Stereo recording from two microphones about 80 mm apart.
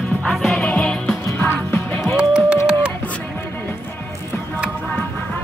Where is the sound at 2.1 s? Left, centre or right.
Centre.